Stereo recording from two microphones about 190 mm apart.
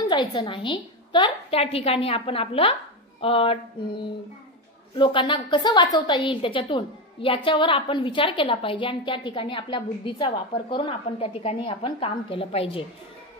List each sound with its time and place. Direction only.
0.1 s a woman's voice: 25° left (ahead or behind)